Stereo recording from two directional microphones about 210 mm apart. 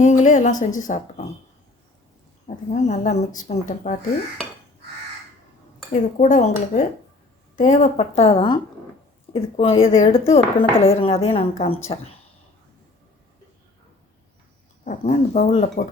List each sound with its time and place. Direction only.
0.0 s a woman's voice: 35° left (ahead or behind)
2.7 s a woman's voice: 35° left (ahead or behind)
5.9 s a woman's voice: 35° left (ahead or behind)
14.8 s a woman's voice: 35° left (ahead or behind)